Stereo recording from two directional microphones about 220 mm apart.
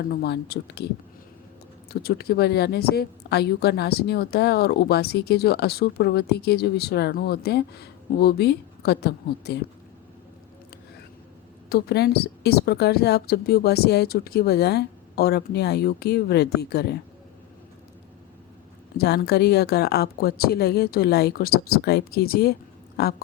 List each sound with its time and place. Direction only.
0.0 s a woman's voice: 45° left (ahead or behind)
1.9 s a woman's voice: 45° left (ahead or behind)
11.7 s a woman's voice: 45° left (ahead or behind)
18.9 s a woman's voice: 45° left (ahead or behind)